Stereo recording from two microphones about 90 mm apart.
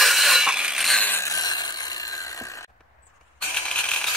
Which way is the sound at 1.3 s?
50° left (ahead or behind).